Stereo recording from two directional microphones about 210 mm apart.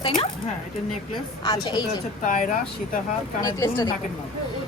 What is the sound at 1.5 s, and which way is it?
Speech, 20° left (ahead or behind).